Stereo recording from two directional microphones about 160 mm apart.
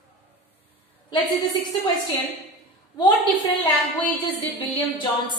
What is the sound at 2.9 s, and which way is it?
Speech, 30° left (ahead or behind).